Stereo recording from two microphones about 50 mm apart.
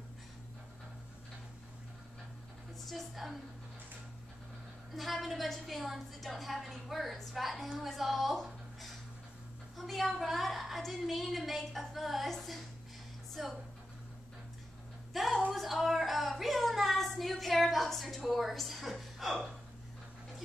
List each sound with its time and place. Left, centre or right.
2.9 s a woman's voice: centre
4.9 s a woman's voice: centre
15.1 s a sound: centre